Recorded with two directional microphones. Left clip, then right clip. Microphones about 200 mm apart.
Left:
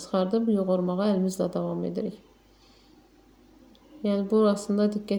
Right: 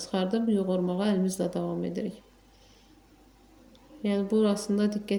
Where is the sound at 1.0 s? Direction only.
50° left (ahead or behind).